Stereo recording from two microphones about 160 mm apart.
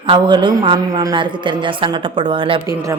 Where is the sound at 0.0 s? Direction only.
30° right (ahead or behind).